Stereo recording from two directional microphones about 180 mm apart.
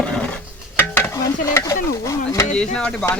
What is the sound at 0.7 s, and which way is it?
Stir, 10° left (ahead or behind).